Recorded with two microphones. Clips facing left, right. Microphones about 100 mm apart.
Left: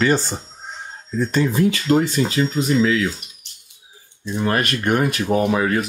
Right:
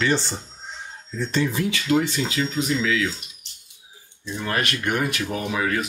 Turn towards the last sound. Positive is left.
turn(degrees=35)  # may be behind; listen again after turning